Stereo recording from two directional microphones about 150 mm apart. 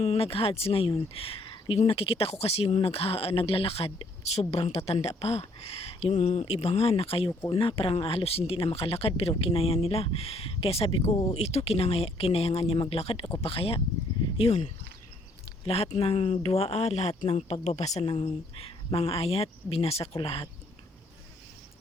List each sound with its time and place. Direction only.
0.0 s speech: 45° left (ahead or behind)